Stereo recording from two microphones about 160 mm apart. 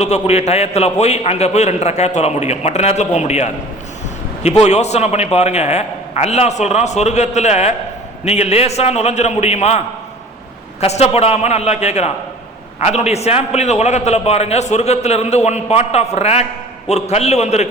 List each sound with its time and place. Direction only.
0.0 s a man's voice: 45° left (ahead or behind)
4.6 s a man's voice: 45° left (ahead or behind)